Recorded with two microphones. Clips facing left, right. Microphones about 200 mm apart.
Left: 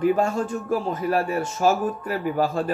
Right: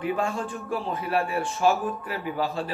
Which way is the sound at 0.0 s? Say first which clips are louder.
Left 6 dB; 40° left (ahead or behind).